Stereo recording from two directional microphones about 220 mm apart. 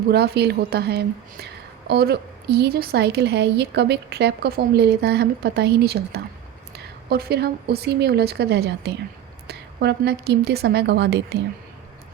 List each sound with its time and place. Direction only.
0.1 s a woman's voice: 50° right (ahead or behind)